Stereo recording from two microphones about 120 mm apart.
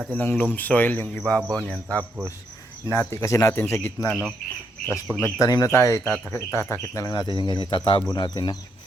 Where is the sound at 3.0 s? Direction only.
25° left (ahead or behind).